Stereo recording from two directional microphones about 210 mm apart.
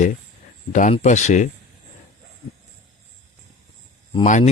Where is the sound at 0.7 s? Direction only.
35° left (ahead or behind).